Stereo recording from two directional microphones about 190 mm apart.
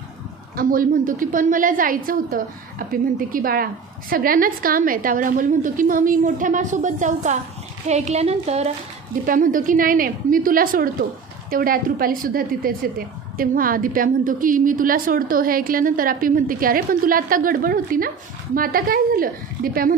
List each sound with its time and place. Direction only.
0.6 s a woman's voice: 45° right (ahead or behind)
9.2 s a woman's voice: 45° right (ahead or behind)